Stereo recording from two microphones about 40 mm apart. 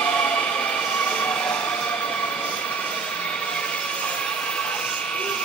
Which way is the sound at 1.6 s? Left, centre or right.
Left.